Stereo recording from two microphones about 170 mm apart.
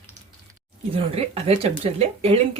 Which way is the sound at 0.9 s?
35° right (ahead or behind).